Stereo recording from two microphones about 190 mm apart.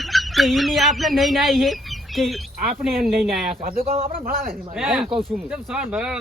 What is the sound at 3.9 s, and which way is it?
Speech, 30° right (ahead or behind).